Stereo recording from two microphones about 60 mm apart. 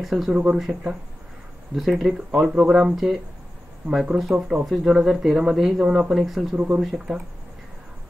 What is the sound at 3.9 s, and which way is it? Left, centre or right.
Speech, centre.